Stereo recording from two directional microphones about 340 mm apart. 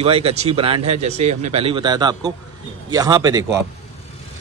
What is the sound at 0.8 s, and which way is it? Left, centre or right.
Speech, right.